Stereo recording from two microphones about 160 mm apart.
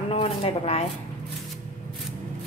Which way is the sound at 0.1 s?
35° left (ahead or behind).